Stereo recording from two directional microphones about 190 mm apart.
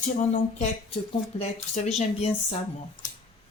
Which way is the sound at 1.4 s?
35° left (ahead or behind).